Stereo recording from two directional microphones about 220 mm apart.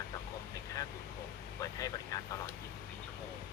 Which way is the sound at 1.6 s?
15° left (ahead or behind).